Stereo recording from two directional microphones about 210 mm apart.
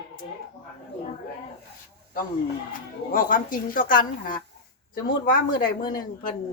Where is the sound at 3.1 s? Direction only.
40° left (ahead or behind).